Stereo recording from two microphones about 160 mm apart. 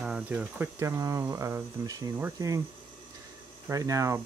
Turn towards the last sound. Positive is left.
turn(degrees=-20)  # may be behind; listen again after turning